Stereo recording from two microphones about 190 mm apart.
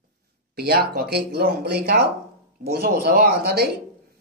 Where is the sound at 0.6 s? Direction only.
55° right (ahead or behind).